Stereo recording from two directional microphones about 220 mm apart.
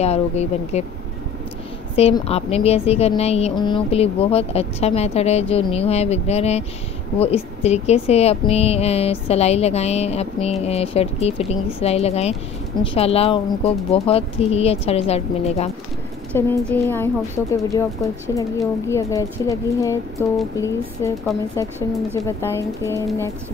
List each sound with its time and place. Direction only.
0.0 s a woman's voice: 30° left (ahead or behind)
2.0 s a woman's voice: 25° left (ahead or behind)
16.3 s a woman's voice: 10° left (ahead or behind)